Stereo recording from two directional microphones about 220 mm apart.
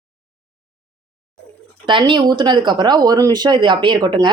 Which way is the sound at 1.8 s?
20° right (ahead or behind).